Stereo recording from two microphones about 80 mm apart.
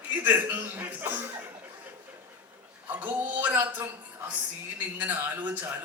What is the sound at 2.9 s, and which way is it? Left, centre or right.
A man's voice, right.